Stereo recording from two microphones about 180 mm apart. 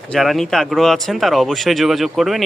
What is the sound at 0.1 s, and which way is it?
Speech, centre (ahead or behind).